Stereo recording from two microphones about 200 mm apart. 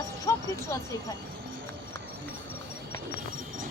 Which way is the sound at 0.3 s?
15° left (ahead or behind).